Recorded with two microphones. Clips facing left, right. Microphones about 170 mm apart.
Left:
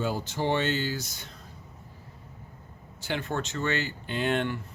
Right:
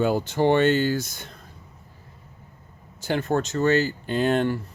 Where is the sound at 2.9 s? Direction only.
45° right (ahead or behind).